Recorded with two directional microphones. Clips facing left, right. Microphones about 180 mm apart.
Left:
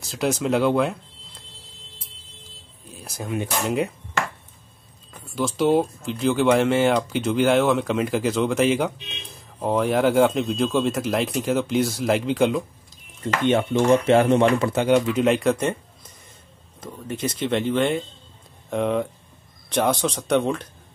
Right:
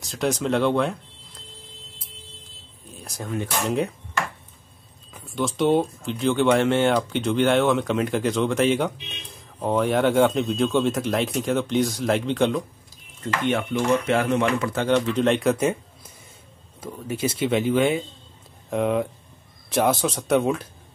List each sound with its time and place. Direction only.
0.0 s speech: centre (ahead or behind)
2.4 s a sound: centre (ahead or behind)
3.3 s speech: 10° left (ahead or behind)
5.1 s speech: centre (ahead or behind)
13.5 s speech: 25° left (ahead or behind)
14.7 s speech: 10° left (ahead or behind); by 20.6 s 5° right (ahead or behind)